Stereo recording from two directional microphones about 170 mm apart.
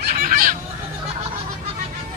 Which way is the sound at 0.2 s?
55° right (ahead or behind).